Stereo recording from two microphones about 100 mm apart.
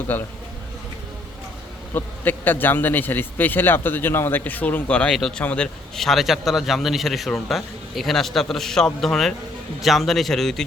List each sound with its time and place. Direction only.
0.1 s a man's voice: 20° left (ahead or behind)
1.9 s a man's voice: 20° left (ahead or behind)
6.0 s a man's voice: centre (ahead or behind)